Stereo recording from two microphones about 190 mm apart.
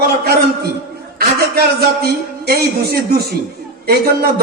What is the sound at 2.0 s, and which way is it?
A man's voice, 55° right (ahead or behind).